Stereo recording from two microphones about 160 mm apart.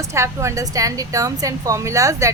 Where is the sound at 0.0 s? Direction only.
20° right (ahead or behind).